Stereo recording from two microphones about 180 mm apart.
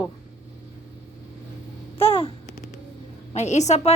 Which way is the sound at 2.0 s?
30° left (ahead or behind).